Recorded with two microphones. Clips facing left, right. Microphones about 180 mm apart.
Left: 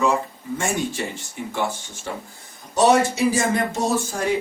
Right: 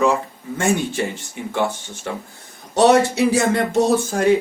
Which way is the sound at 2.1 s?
65° right (ahead or behind).